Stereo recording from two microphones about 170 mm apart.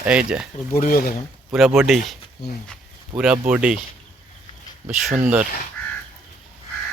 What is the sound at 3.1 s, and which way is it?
Speech, 5° right (ahead or behind).